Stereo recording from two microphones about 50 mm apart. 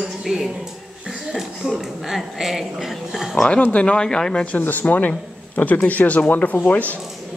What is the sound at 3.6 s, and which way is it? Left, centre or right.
Speech, left.